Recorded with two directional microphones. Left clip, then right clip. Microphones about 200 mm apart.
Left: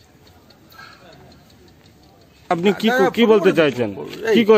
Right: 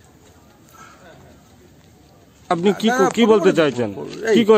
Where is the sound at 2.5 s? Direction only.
Centre (ahead or behind).